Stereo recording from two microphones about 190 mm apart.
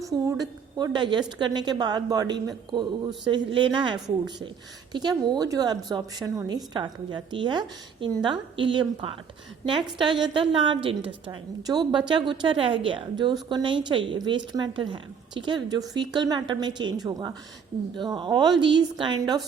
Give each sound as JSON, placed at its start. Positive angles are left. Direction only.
{"t": 0.0, "sound": "a woman's voice", "side_deg": -15}